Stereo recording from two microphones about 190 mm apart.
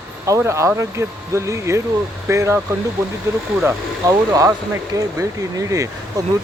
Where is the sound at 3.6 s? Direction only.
15° right (ahead or behind).